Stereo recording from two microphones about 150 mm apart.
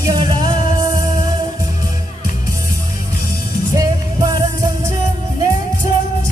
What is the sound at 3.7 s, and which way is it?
Music, 25° right (ahead or behind).